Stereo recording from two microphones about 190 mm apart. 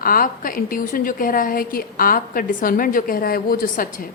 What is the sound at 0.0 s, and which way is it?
A woman's voice, 50° left (ahead or behind).